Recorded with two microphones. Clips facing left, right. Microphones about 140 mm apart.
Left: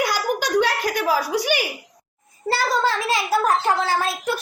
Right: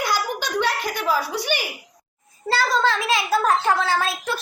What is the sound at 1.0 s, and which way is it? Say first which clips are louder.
A child's voice: left 1 dB; 10° left (ahead or behind).